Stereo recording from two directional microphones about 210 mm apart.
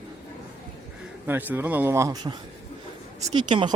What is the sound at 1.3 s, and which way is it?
Speech, 10° right (ahead or behind).